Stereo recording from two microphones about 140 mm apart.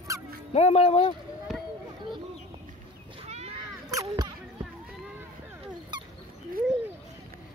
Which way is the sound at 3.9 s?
25° right (ahead or behind).